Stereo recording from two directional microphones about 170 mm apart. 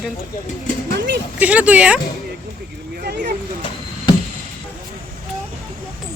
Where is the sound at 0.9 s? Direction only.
90° right.